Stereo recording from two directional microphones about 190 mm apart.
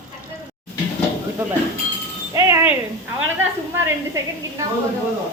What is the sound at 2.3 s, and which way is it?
Chink, 15° right (ahead or behind).